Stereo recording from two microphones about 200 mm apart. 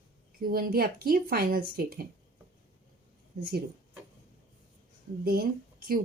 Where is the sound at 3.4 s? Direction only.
50° right (ahead or behind).